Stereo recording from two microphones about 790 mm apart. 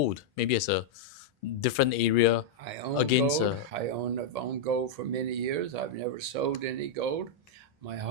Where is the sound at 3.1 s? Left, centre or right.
Left.